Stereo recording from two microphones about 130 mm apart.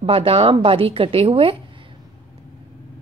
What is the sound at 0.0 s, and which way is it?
A woman's voice, 45° right (ahead or behind).